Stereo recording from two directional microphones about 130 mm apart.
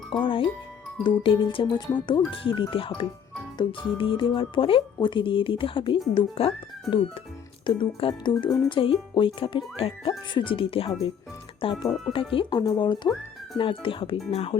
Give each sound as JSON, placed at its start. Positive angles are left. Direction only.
{"t": 0.1, "sound": "speech", "side_deg": 40}
{"t": 6.9, "sound": "speech", "side_deg": 0}
{"t": 7.7, "sound": "speech", "side_deg": 40}